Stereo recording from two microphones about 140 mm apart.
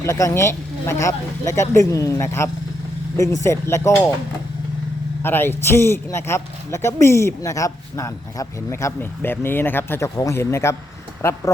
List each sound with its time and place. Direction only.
0.0 s speech: 20° left (ahead or behind)
5.2 s speech: 15° left (ahead or behind)